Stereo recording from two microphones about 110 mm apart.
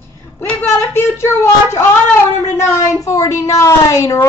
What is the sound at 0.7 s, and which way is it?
Speech, 25° left (ahead or behind).